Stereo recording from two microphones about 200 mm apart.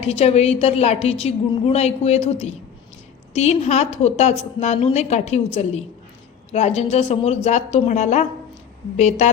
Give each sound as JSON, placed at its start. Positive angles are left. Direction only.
{"t": 0.0, "sound": "a woman's voice", "side_deg": 30}